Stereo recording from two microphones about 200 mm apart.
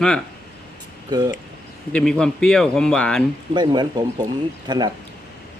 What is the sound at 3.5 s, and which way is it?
Speech, 20° right (ahead or behind).